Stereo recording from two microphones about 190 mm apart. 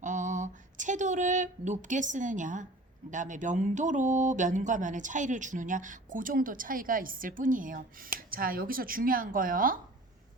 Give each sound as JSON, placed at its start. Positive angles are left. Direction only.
{"t": 0.0, "sound": "speech", "side_deg": -40}